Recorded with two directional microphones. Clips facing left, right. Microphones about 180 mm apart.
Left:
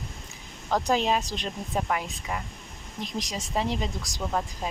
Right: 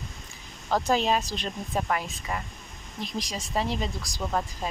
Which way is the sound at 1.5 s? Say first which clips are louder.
Even; 5° left (ahead or behind).